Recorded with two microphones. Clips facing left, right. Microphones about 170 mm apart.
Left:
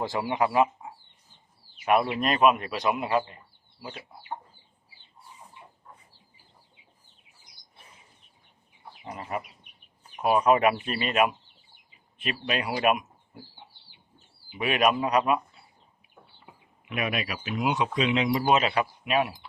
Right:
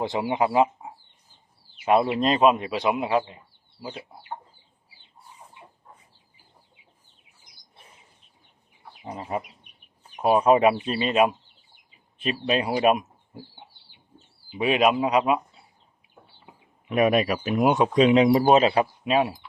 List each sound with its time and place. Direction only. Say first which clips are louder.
0.0 s speech: right 3 dB; 20° right (ahead or behind)
9.0 s speech: right 3 dB; 25° right (ahead or behind)
12.8 s a sound: right 4 dB; 30° right (ahead or behind)
14.6 s speech: right 3 dB; 25° right (ahead or behind)
15.0 s speech: right 2 dB; 15° right (ahead or behind)
16.9 s speech: right 10 dB; 40° right (ahead or behind)